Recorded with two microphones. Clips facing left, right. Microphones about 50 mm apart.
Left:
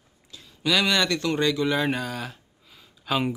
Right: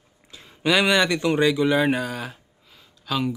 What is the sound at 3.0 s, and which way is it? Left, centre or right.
Speech, centre.